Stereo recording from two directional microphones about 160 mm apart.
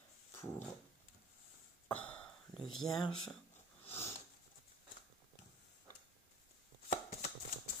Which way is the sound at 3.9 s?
40° left (ahead or behind).